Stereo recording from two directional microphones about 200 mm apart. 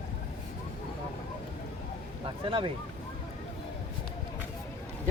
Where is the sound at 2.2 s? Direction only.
25° right (ahead or behind).